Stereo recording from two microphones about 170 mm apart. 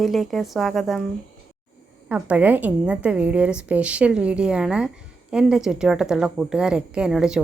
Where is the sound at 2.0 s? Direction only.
10° right (ahead or behind).